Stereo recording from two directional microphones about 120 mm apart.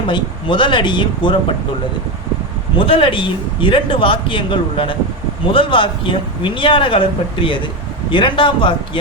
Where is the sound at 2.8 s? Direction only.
45° left (ahead or behind).